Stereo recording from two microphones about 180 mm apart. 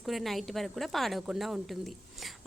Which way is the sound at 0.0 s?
Centre (ahead or behind).